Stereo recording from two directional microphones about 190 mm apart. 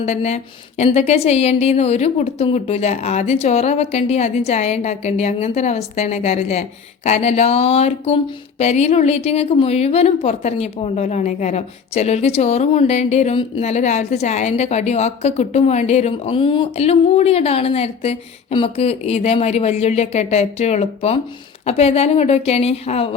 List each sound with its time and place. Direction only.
0.0 s a woman's voice: 35° left (ahead or behind)